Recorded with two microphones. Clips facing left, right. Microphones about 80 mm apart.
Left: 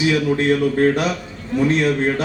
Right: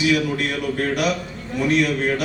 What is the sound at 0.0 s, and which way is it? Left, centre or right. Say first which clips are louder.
A man's voice: left 3 dB; left.